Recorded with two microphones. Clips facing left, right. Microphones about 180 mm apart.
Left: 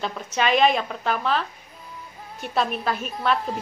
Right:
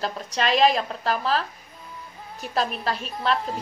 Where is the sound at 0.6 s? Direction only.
35° right (ahead or behind).